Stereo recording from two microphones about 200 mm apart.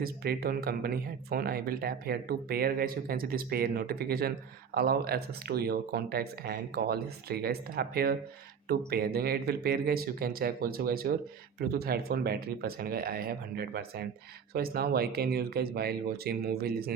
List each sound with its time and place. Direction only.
0.0 s speech: 50° right (ahead or behind)